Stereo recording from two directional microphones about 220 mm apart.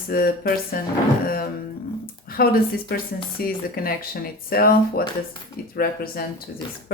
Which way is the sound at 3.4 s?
40° left (ahead or behind).